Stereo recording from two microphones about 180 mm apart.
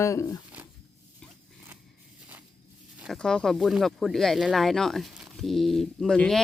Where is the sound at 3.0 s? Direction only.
Centre (ahead or behind).